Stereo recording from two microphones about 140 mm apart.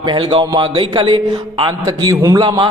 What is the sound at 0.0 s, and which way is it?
A man's voice, 35° right (ahead or behind).